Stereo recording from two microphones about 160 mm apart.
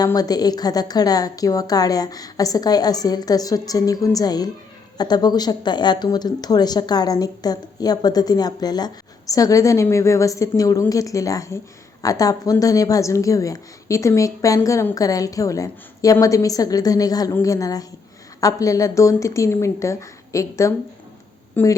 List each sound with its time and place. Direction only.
0.0 s speech: 25° left (ahead or behind)